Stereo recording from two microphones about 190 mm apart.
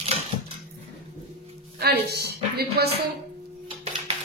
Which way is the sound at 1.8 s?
55° right (ahead or behind).